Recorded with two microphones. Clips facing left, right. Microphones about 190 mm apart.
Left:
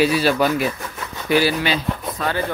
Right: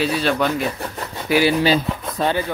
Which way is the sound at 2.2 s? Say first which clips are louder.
Right 5 dB; 30° right (ahead or behind).